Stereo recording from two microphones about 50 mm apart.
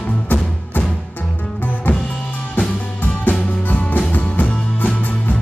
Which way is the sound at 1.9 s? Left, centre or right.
Left.